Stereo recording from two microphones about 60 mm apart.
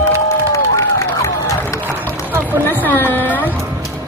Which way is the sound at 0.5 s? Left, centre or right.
Left.